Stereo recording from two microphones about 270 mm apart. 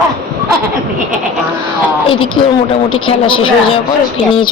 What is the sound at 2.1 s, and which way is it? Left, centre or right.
Speech, centre.